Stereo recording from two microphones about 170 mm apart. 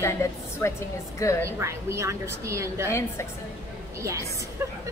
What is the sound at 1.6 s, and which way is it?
A woman's voice, 15° right (ahead or behind).